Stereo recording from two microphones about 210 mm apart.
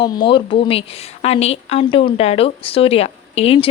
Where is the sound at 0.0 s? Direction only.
20° left (ahead or behind).